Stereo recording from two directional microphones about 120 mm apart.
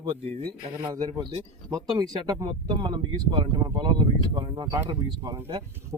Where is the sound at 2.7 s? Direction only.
40° right (ahead or behind).